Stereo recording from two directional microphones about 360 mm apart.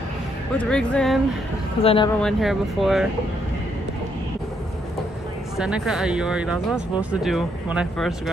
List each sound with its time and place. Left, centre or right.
0.6 s speech: centre
1.8 s speech: centre
2.2 s speech: centre
5.6 s speech: centre